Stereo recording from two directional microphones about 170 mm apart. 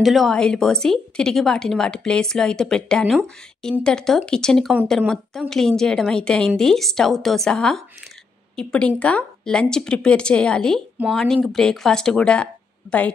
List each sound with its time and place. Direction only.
0.0 s a woman's voice: centre (ahead or behind)